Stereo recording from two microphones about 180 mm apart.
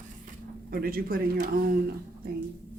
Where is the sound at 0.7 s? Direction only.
55° right (ahead or behind).